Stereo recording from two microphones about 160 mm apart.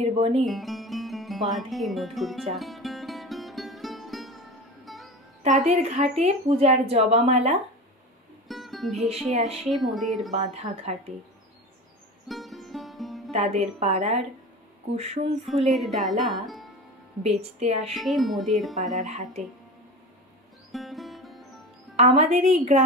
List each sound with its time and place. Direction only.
0.0 s speech: 40° right (ahead or behind)
0.5 s music: centre (ahead or behind)
5.7 s speech: 45° right (ahead or behind)
8.5 s music: centre (ahead or behind)
9.7 s speech: centre (ahead or behind)
10.3 s a woman's voice: 45° right (ahead or behind)
12.3 s music: centre (ahead or behind)
13.3 s a woman's voice: 45° right (ahead or behind)
15.4 s speech: centre (ahead or behind)
17.2 s speech: 40° right (ahead or behind)
17.9 s speech: centre (ahead or behind)
18.9 s a woman's voice: 45° right (ahead or behind)
20.7 s music: centre (ahead or behind)
21.9 s a woman's voice: 45° right (ahead or behind)